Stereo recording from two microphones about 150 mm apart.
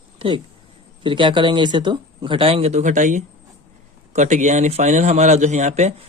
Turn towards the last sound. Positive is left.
turn(degrees=-50)  # may be behind; listen again after turning